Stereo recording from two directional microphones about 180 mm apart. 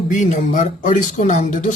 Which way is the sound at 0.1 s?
45° left (ahead or behind).